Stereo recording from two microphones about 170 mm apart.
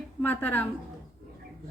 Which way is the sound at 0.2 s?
10° left (ahead or behind).